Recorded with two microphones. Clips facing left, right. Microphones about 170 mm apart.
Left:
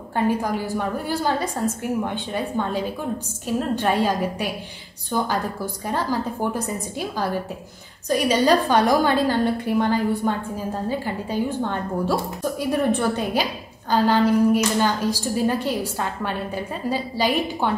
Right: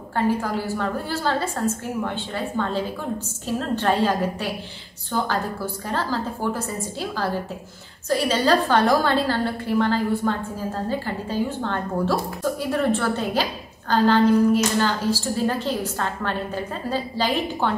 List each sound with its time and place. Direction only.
0.1 s a woman's voice: 15° left (ahead or behind)